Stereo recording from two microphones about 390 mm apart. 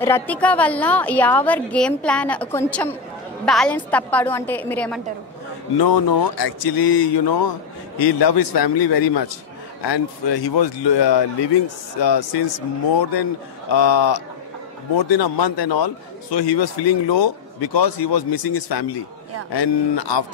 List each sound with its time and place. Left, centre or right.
0.0 s a woman's voice: centre
5.8 s a man's voice: left
17.7 s speech: left
19.5 s a man's voice: left